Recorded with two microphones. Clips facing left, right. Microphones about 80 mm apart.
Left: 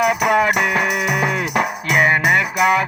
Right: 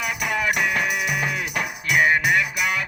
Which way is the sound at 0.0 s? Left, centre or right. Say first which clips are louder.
Left 9 dB; left.